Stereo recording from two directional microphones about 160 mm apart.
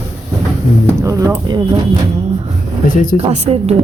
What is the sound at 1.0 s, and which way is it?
Speech, 20° right (ahead or behind).